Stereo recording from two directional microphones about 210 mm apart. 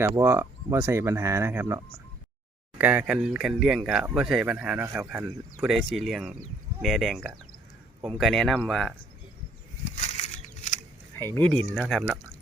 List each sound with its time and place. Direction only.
0.0 s speech: 15° right (ahead or behind); by 8.9 s 5° left (ahead or behind)
9.9 s a sound: 35° left (ahead or behind)
11.3 s speech: 5° left (ahead or behind)